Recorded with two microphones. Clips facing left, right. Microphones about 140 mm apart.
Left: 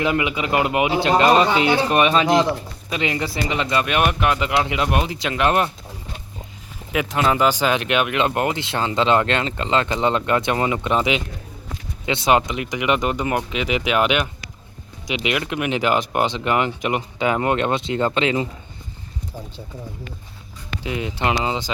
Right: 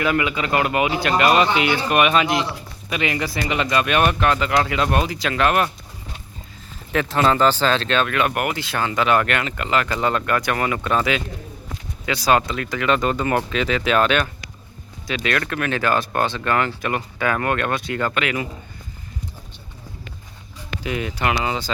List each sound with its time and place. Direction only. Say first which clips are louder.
0.0 s speech: even; 20° left (ahead or behind); by 2.5 s 40° left (ahead or behind)
2.9 s speech: even; 25° left (ahead or behind)
6.9 s speech: right 1 dB; 10° left (ahead or behind)
20.8 s speech: even; 25° left (ahead or behind)